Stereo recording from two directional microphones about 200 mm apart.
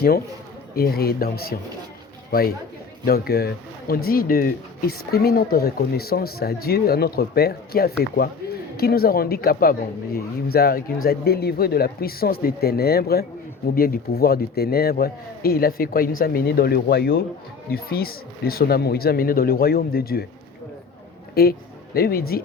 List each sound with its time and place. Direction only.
0.8 s speech: 50° left (ahead or behind)
3.1 s speech: 50° left (ahead or behind)
21.4 s speech: 50° left (ahead or behind)